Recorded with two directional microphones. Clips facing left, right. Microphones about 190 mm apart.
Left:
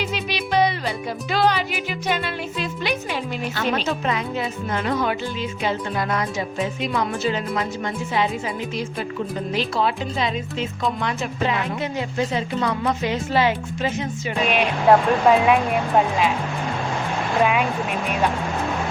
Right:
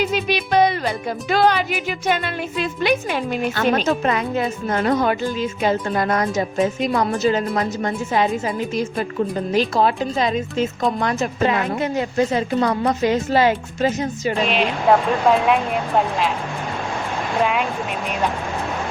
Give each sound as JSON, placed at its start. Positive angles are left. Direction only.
{"t": 0.0, "sound": "music", "side_deg": -50}
{"t": 9.5, "sound": "a woman's voice", "side_deg": -45}
{"t": 14.4, "sound": "speech", "side_deg": 5}
{"t": 17.4, "sound": "speech", "side_deg": 5}